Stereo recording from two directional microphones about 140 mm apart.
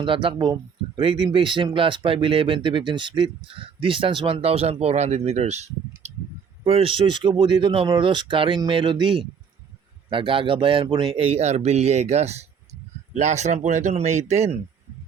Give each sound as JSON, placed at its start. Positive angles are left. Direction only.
{"t": 0.0, "sound": "speech", "side_deg": -35}